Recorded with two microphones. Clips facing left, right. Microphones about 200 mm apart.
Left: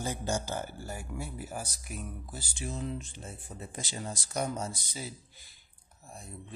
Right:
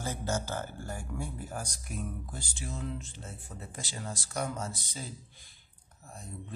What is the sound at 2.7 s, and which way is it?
Speech, 20° left (ahead or behind).